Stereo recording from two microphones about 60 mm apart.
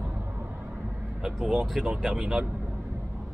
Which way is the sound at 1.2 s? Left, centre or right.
Centre.